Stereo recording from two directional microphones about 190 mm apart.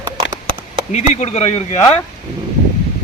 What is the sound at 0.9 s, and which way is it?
Speech, 35° left (ahead or behind).